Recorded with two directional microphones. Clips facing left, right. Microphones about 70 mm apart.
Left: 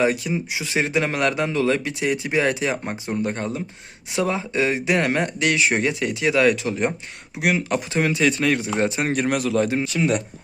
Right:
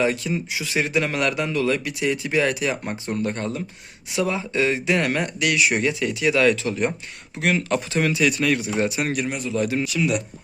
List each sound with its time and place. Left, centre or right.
0.0 s speech: left
9.2 s a man's voice: left
9.6 s speech: left